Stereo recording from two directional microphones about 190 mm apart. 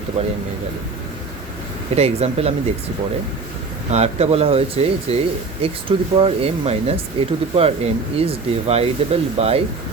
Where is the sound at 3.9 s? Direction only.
35° right (ahead or behind).